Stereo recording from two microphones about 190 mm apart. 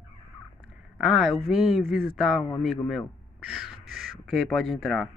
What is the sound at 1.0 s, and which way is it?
Speech, 5° right (ahead or behind).